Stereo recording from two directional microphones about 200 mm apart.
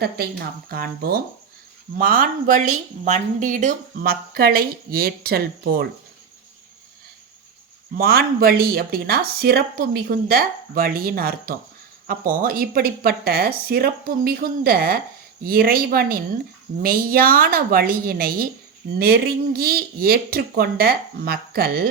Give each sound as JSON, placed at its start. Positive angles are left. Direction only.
{"t": 0.0, "sound": "speech", "side_deg": -50}
{"t": 7.9, "sound": "speech", "side_deg": -50}